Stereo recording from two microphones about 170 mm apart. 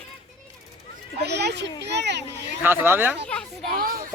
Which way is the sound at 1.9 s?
90° right.